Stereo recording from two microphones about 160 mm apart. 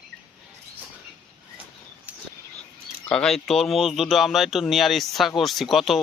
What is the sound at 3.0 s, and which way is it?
Speech, 5° left (ahead or behind).